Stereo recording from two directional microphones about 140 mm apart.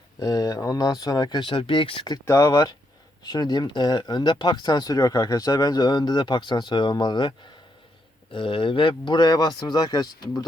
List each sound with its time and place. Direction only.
0.2 s speech: 25° left (ahead or behind)